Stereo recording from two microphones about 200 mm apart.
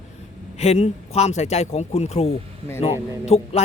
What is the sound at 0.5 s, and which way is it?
Speech, 35° left (ahead or behind).